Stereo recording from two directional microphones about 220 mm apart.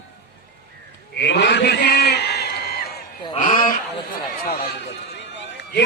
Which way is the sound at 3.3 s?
30° left (ahead or behind).